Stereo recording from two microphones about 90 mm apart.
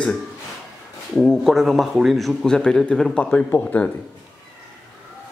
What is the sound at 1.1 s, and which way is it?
A man's voice, 5° left (ahead or behind).